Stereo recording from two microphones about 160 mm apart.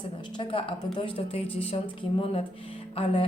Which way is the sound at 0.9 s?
35° left (ahead or behind).